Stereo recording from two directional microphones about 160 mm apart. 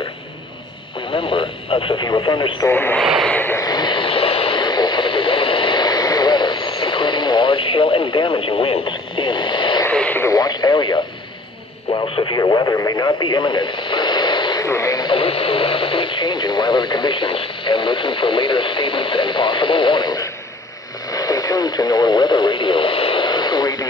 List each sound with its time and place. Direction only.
1.1 s speech: 35° left (ahead or behind)
2.7 s speech: 15° left (ahead or behind)
3.0 s a sound: centre (ahead or behind)
3.3 s radio: 15° left (ahead or behind)
9.8 s speech: 15° left (ahead or behind)